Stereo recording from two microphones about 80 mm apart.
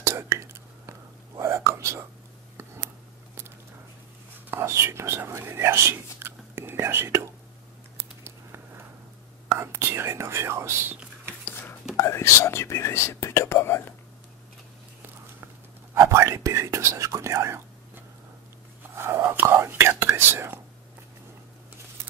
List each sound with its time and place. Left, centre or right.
0.0 s whispering: right
4.5 s speech: right
8.2 s a sound: right
9.5 s speech: right
12.0 s speech: left
15.0 s whispering: right
16.1 s speech: right